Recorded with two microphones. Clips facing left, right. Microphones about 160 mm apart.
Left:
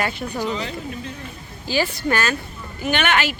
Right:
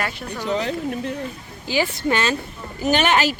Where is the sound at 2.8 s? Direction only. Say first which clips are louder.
Right 3 dB; 35° right (ahead or behind).